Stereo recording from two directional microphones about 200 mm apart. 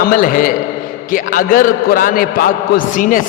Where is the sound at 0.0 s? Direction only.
45° left (ahead or behind).